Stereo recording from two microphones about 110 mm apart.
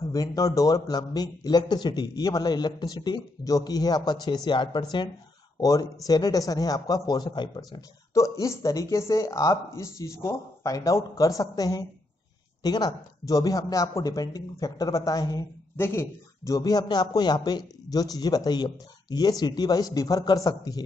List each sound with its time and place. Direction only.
0.0 s a man's voice: 35° left (ahead or behind)
5.6 s a man's voice: 35° left (ahead or behind)
8.1 s a man's voice: 30° left (ahead or behind)
15.7 s a man's voice: 20° left (ahead or behind)